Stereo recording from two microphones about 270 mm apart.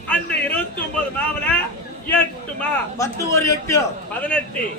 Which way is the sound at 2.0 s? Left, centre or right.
Centre.